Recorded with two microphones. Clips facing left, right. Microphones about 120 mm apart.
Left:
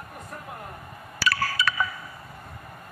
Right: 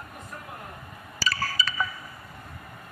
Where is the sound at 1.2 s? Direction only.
65° left (ahead or behind).